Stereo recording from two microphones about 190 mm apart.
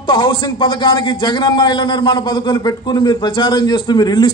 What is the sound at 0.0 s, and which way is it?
Speech, 25° left (ahead or behind).